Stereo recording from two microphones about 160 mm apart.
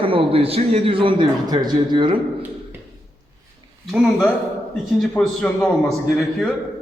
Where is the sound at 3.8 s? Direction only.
5° right (ahead or behind).